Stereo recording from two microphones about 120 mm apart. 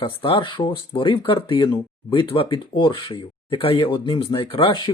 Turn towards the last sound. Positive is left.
turn(degrees=45)  # may be behind; listen again after turning